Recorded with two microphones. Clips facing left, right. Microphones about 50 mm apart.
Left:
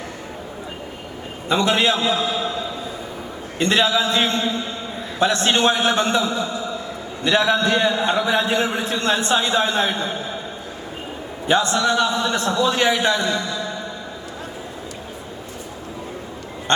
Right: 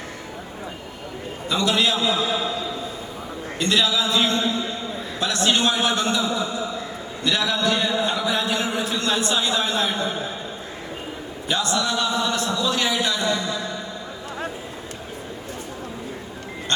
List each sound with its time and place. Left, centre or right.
1.5 s a man's voice: left
3.6 s a man's voice: left
11.4 s a man's voice: left